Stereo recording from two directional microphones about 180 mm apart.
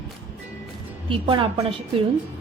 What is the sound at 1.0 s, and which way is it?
Speech, 30° right (ahead or behind).